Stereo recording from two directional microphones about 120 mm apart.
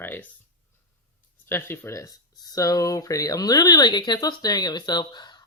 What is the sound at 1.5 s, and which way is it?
Speech, 20° left (ahead or behind).